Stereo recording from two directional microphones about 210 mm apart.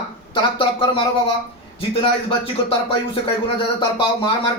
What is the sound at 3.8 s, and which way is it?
Speech, 20° left (ahead or behind).